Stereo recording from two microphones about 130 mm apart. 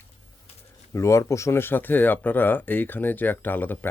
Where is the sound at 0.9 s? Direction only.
20° left (ahead or behind).